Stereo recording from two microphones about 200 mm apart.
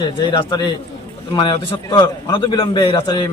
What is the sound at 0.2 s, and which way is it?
A man's voice, 25° left (ahead or behind).